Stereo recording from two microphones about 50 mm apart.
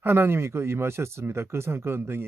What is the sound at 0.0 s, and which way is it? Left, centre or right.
Speech, right.